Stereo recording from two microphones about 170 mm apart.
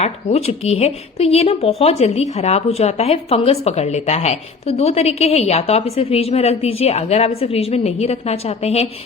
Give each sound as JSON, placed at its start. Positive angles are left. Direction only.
{"t": 0.0, "sound": "a woman's voice", "side_deg": 40}